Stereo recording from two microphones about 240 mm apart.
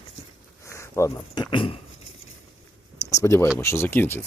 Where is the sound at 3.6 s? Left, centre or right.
Centre.